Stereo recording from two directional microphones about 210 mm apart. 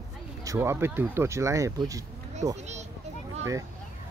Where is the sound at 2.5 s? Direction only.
35° right (ahead or behind).